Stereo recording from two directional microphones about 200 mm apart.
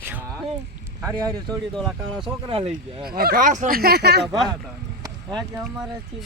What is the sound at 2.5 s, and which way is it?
Speech, 30° right (ahead or behind).